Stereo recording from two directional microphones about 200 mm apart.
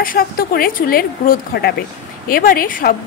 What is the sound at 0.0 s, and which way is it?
Speech, 45° left (ahead or behind).